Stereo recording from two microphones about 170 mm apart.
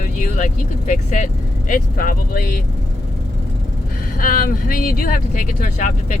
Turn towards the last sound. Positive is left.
turn(degrees=50)  # may be behind; listen again after turning